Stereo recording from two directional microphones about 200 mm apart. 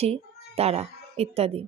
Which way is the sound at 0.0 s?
30° right (ahead or behind).